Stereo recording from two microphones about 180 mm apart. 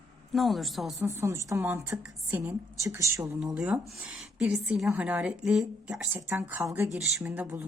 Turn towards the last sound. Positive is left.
turn(degrees=-10)  # may be behind; listen again after turning